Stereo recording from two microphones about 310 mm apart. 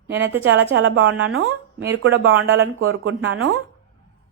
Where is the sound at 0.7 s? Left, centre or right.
Right.